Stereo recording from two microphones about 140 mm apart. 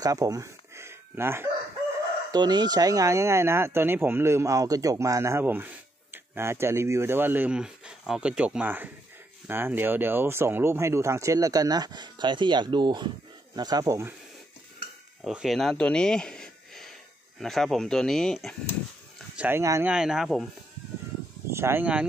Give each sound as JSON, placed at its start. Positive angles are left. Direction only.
{"t": 0.0, "sound": "a sound", "side_deg": -25}
{"t": 2.3, "sound": "speech", "side_deg": -30}
{"t": 15.2, "sound": "speech", "side_deg": 0}
{"t": 19.3, "sound": "speech", "side_deg": -15}
{"t": 19.9, "sound": "speech", "side_deg": -5}
{"t": 21.5, "sound": "speech", "side_deg": -20}